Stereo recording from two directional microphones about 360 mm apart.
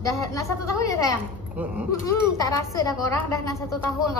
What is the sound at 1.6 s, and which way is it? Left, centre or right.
Speech, centre.